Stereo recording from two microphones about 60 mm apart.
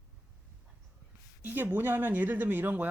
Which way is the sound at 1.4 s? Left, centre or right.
Right.